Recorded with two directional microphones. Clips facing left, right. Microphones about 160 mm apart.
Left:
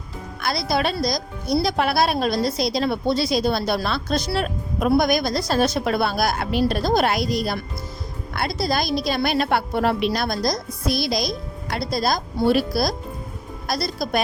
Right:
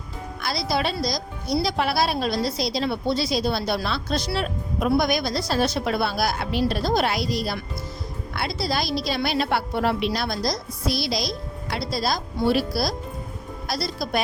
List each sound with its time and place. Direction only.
0.4 s a woman's voice: 50° left (ahead or behind)